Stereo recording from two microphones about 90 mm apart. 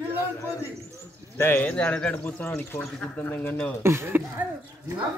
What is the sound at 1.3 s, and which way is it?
Speech, 20° left (ahead or behind).